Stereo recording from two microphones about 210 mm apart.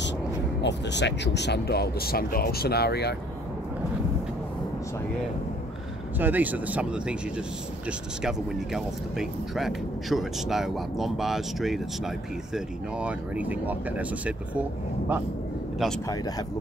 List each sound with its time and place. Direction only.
0.6 s speech: 55° left (ahead or behind)
6.1 s speech: 10° right (ahead or behind)
8.2 s speech: centre (ahead or behind)
15.8 s speech: centre (ahead or behind)